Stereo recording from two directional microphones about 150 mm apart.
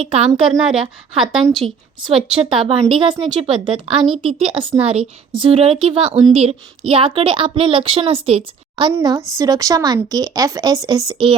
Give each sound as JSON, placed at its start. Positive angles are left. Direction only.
{"t": 0.0, "sound": "speech", "side_deg": -40}
{"t": 0.6, "sound": "a woman's voice", "side_deg": -5}
{"t": 2.9, "sound": "speech", "side_deg": -35}
{"t": 8.9, "sound": "a woman's voice", "side_deg": -20}